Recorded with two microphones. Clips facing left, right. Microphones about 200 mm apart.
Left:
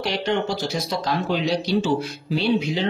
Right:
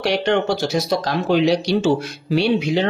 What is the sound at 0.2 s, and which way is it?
Speech, 75° right (ahead or behind).